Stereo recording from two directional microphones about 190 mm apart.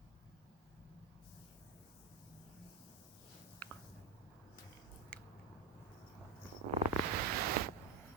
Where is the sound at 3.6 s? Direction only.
10° left (ahead or behind).